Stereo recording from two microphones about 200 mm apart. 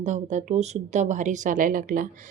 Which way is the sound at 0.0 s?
35° right (ahead or behind).